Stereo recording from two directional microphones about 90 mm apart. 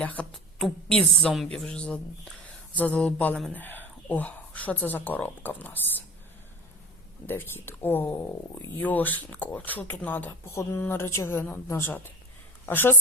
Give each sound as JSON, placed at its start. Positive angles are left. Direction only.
{"t": 0.0, "sound": "a woman's voice", "side_deg": 15}
{"t": 7.3, "sound": "speech", "side_deg": 25}
{"t": 10.5, "sound": "speech", "side_deg": 35}